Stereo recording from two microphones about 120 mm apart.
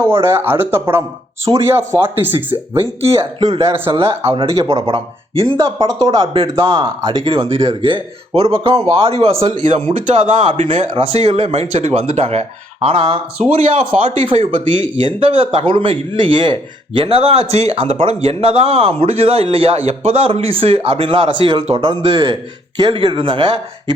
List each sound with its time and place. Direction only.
0.1 s speech: 20° right (ahead or behind)
3.4 s speech: 50° right (ahead or behind)
5.5 s speech: 25° right (ahead or behind)
6.1 s speech: 40° right (ahead or behind)
9.9 s speech: 90° right
11.1 s speech: 60° right (ahead or behind)
13.4 s speech: 65° right (ahead or behind)
14.3 s speech: 45° right (ahead or behind)